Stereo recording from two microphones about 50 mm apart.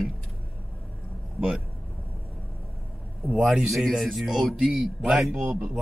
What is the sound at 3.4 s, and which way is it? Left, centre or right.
A man's voice, centre.